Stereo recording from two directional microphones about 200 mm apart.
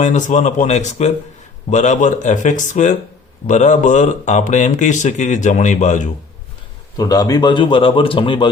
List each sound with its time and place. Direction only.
0.0 s speech: 35° left (ahead or behind)
6.9 s speech: 20° left (ahead or behind)